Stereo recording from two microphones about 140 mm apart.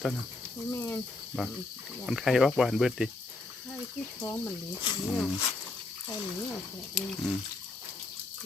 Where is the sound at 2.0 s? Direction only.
Centre (ahead or behind).